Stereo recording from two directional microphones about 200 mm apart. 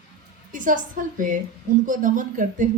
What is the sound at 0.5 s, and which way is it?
A woman's voice, 40° right (ahead or behind).